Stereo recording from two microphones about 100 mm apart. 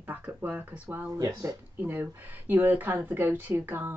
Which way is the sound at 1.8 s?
20° right (ahead or behind).